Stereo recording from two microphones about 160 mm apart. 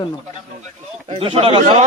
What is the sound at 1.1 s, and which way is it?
Speech, 30° right (ahead or behind).